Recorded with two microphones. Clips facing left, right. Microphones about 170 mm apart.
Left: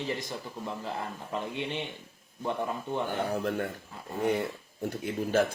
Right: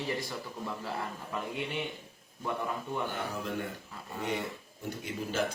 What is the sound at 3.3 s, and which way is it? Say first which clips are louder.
Speech: left 6 dB; 55° left (ahead or behind).